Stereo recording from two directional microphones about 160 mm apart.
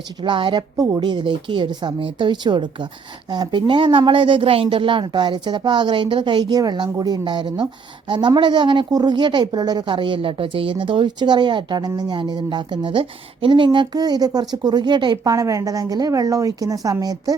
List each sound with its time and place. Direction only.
0.2 s a woman's voice: 30° right (ahead or behind)